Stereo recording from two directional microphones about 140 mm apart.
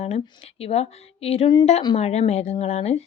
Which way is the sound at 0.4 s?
50° left (ahead or behind).